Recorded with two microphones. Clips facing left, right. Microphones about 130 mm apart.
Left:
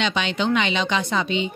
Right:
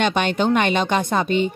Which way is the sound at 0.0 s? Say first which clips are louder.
Right 4 dB; 50° right (ahead or behind).